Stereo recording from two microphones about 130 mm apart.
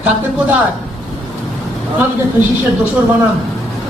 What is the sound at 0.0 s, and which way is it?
Speech, 10° right (ahead or behind).